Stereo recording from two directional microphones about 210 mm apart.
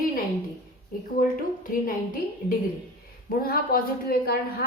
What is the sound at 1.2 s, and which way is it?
A woman's voice, 40° left (ahead or behind).